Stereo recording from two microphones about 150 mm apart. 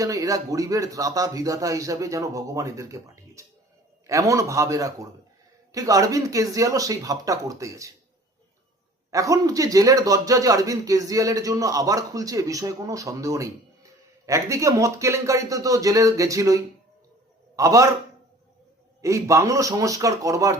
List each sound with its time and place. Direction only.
0.0 s a man's voice: 20° right (ahead or behind)
9.0 s a man's voice: 20° right (ahead or behind)
17.6 s a man's voice: 20° right (ahead or behind)
19.0 s a man's voice: 20° right (ahead or behind)